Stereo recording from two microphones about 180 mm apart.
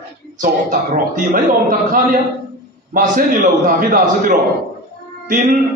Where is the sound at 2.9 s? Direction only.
50° right (ahead or behind).